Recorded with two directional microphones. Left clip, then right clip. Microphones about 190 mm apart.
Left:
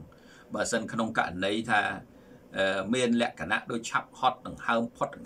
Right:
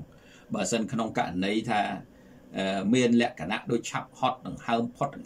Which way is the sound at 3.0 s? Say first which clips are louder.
Right 3 dB; 15° right (ahead or behind).